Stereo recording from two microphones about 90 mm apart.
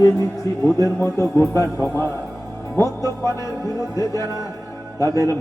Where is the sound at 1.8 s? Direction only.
20° left (ahead or behind).